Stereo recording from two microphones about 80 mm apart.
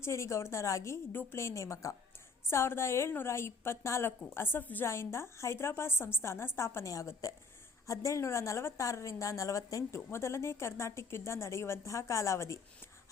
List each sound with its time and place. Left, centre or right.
0.0 s a woman's voice: left